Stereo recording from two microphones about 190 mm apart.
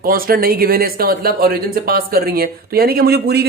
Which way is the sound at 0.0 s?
50° right (ahead or behind).